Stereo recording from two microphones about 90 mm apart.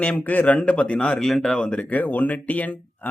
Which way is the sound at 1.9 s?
20° left (ahead or behind).